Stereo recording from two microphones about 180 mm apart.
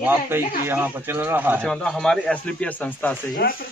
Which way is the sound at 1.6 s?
Centre (ahead or behind).